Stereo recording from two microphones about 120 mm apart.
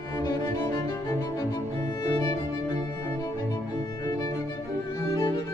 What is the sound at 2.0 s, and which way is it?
Music, 30° left (ahead or behind).